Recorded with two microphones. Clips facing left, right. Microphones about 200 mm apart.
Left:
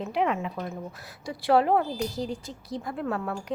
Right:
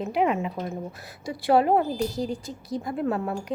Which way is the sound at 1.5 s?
10° right (ahead or behind).